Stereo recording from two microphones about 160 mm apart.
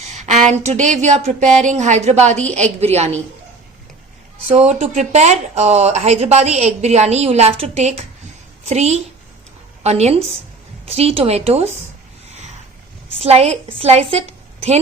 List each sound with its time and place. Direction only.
0.1 s a sound: 45° right (ahead or behind)
0.5 s speech: 45° right (ahead or behind)
4.4 s a woman's voice: 40° right (ahead or behind)
13.1 s a woman's voice: 40° right (ahead or behind)